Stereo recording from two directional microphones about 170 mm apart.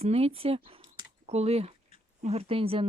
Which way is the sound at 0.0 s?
35° right (ahead or behind).